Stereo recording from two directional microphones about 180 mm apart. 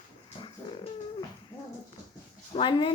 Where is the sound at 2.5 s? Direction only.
25° left (ahead or behind).